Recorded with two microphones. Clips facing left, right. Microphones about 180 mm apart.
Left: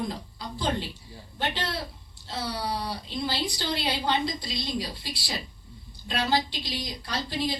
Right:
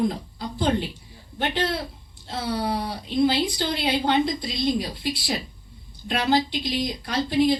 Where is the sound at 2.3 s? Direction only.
55° right (ahead or behind).